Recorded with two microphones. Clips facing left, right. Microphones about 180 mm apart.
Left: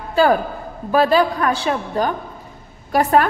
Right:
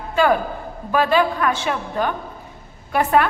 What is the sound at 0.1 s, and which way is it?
A man's voice, 35° left (ahead or behind).